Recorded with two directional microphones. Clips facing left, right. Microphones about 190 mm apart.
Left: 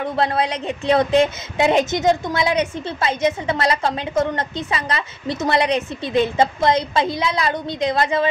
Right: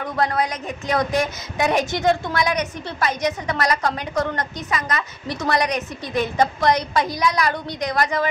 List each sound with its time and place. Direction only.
0.0 s a woman's voice: 30° left (ahead or behind)